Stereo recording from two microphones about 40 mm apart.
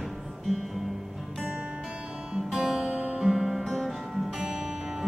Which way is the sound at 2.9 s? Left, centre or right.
Right.